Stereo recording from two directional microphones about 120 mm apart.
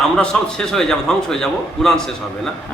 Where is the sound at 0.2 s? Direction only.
5° left (ahead or behind).